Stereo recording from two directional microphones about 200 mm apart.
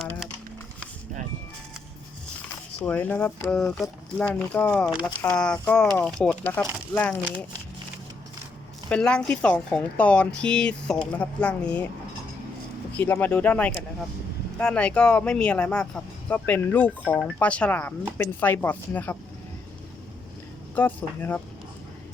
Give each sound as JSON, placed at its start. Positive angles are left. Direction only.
{"t": 0.0, "sound": "a sound", "side_deg": 0}
{"t": 2.8, "sound": "speech", "side_deg": 5}
{"t": 8.9, "sound": "speech", "side_deg": 5}
{"t": 12.9, "sound": "speech", "side_deg": 5}
{"t": 20.7, "sound": "speech", "side_deg": 10}